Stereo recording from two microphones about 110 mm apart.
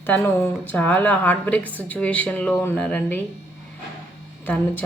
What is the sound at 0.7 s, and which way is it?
Speech, 15° left (ahead or behind).